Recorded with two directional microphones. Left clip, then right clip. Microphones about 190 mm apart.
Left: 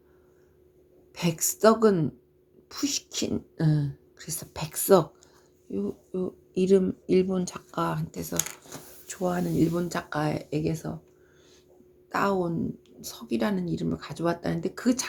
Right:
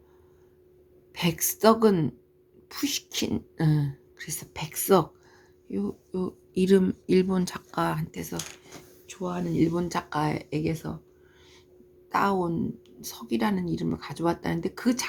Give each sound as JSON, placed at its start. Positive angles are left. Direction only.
{"t": 1.1, "sound": "beatboxing", "side_deg": -20}
{"t": 5.7, "sound": "speech", "side_deg": -30}
{"t": 8.1, "sound": "speech", "side_deg": -15}
{"t": 9.0, "sound": "a sound", "side_deg": 0}
{"t": 9.6, "sound": "speech", "side_deg": -20}
{"t": 12.1, "sound": "beatboxing", "side_deg": -20}
{"t": 13.0, "sound": "speech", "side_deg": -20}